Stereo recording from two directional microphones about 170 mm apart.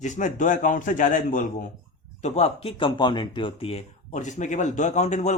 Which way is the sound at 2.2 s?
40° left (ahead or behind).